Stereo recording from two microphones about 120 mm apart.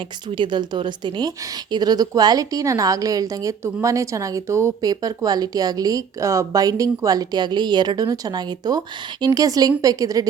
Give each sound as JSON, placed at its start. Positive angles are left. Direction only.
{"t": 0.3, "sound": "a woman's voice", "side_deg": -40}